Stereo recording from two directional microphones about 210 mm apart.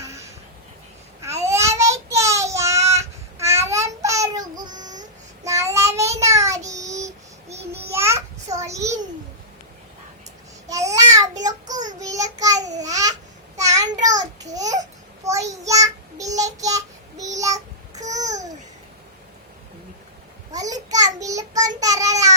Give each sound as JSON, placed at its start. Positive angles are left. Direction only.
{"t": 1.2, "sound": "child singing", "side_deg": -15}
{"t": 7.9, "sound": "a sound", "side_deg": -10}
{"t": 10.7, "sound": "babbling", "side_deg": -15}
{"t": 11.7, "sound": "child singing", "side_deg": -35}
{"t": 11.9, "sound": "child singing", "side_deg": -15}
{"t": 12.8, "sound": "babbling", "side_deg": -15}
{"t": 13.6, "sound": "child singing", "side_deg": -15}
{"t": 14.2, "sound": "a sound", "side_deg": -15}
{"t": 15.2, "sound": "child singing", "side_deg": -15}
{"t": 18.0, "sound": "babbling", "side_deg": -35}
{"t": 20.5, "sound": "a sound", "side_deg": -15}
{"t": 21.8, "sound": "child singing", "side_deg": -15}